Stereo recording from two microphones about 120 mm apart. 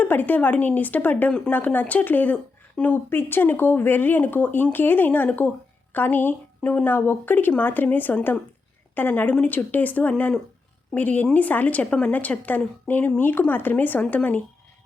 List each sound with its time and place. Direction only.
0.0 s speech: 15° left (ahead or behind)